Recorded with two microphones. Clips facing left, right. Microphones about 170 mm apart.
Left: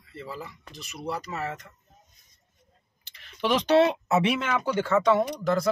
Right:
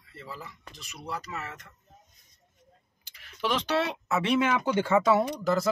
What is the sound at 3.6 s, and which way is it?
Speech, 25° left (ahead or behind).